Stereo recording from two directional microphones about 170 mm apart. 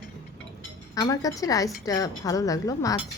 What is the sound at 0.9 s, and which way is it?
A woman's voice, 20° left (ahead or behind).